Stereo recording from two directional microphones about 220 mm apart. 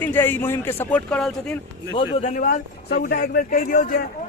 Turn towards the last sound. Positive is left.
turn(degrees=40)  # may be behind; listen again after turning